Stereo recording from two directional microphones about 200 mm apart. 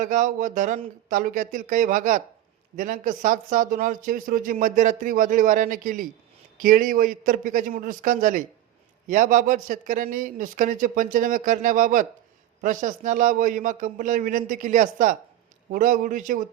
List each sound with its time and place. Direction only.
0.0 s a man's voice: 40° right (ahead or behind)